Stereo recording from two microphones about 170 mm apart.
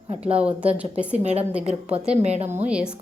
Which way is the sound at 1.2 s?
40° right (ahead or behind).